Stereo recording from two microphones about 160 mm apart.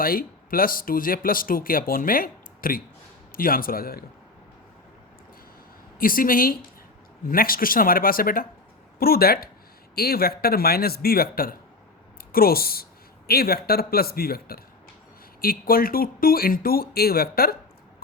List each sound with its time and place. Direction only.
0.0 s speech: 65° left (ahead or behind)
6.0 s speech: 60° left (ahead or behind)